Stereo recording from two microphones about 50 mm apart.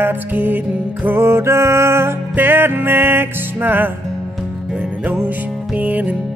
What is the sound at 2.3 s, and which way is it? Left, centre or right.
Music, right.